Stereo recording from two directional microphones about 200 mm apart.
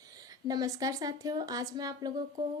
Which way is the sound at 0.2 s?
20° right (ahead or behind).